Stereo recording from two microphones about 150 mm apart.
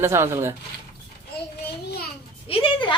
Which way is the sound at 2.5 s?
35° left (ahead or behind).